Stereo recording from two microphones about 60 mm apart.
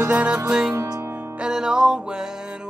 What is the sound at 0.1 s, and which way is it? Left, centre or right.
Music, right.